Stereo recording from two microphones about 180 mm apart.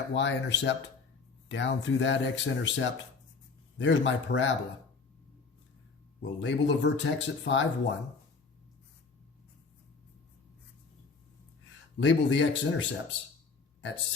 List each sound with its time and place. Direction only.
0.1 s speech: 75° left (ahead or behind)
6.2 s speech: 90° left
11.9 s speech: 90° left
13.8 s speech: 90° left